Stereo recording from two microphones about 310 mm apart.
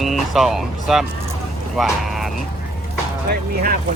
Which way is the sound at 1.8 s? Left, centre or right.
Centre.